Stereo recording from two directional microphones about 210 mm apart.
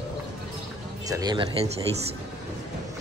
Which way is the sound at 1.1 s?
20° right (ahead or behind).